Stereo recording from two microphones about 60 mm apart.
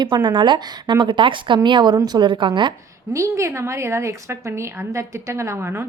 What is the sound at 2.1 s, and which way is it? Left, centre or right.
Speech, right.